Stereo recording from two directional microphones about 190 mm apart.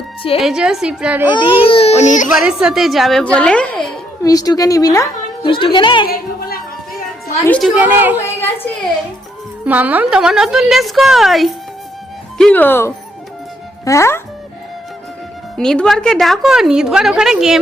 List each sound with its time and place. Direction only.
0.2 s a woman's voice: 30° left (ahead or behind)
0.4 s a woman's voice: 5° right (ahead or behind)
1.6 s a child's voice: 30° left (ahead or behind)
2.3 s a woman's voice: 5° right (ahead or behind)
4.2 s a woman's voice: 20° left (ahead or behind)
6.1 s music: 50° left (ahead or behind)
7.6 s a woman's voice: 10° right (ahead or behind)
8.4 s a sound: 10° left (ahead or behind)
9.6 s a woman's voice: 10° right (ahead or behind); by 14.2 s 15° left (ahead or behind)
15.5 s a woman's voice: 5° left (ahead or behind)